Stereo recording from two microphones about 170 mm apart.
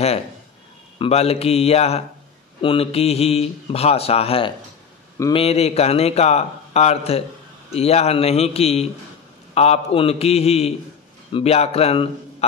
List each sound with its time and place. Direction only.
0.9 s a man's voice: 35° left (ahead or behind)